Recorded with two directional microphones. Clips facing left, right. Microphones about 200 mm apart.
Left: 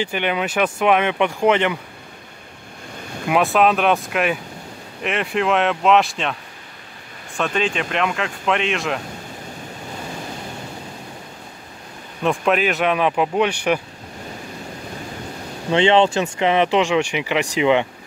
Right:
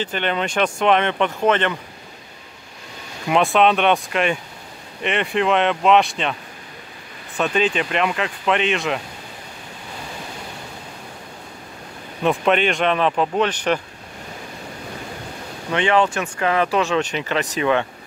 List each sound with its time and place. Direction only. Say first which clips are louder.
0.0 s speech: left 1 dB; 10° left (ahead or behind)
3.3 s speech: even; 5° left (ahead or behind)
7.3 s speech: right 2 dB; centre (ahead or behind)
12.2 s speech: right 1 dB; centre (ahead or behind)
15.7 s speech: left 3 dB; 25° left (ahead or behind)